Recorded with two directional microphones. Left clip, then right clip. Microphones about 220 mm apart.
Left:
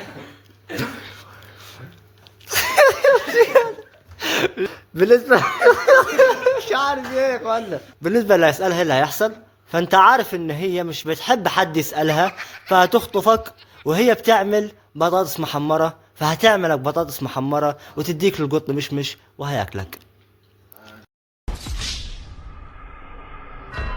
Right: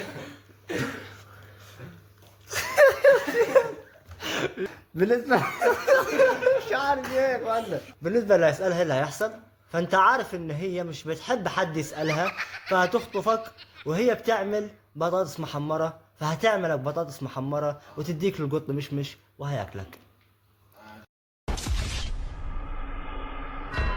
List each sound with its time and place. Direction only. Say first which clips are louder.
1.0 s a sound: left 7 dB; 50° left (ahead or behind)
4.2 s chuckle: left 9 dB; 45° left (ahead or behind)
8.0 s a man's voice: left 6 dB; 50° left (ahead or behind)
12.3 s a sound: left 1 dB; centre (ahead or behind)
12.7 s a man's voice: left 9 dB; 50° left (ahead or behind)
21.5 s music: right 2 dB; centre (ahead or behind)
23.8 s music: left 1 dB; centre (ahead or behind)